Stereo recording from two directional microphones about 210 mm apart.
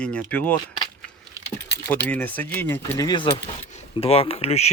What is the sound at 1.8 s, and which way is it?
Speech, 10° left (ahead or behind).